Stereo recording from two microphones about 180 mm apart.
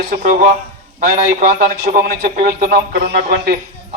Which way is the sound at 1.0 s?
45° right (ahead or behind).